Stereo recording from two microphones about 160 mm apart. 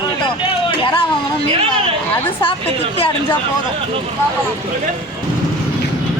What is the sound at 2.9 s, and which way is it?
Speech, 35° left (ahead or behind).